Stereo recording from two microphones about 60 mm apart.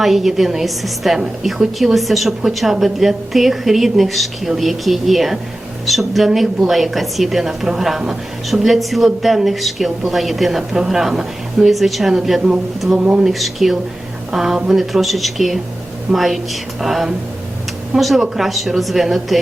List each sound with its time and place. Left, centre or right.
0.0 s a woman's voice: centre
13.0 s speech: centre
13.2 s a woman's voice: centre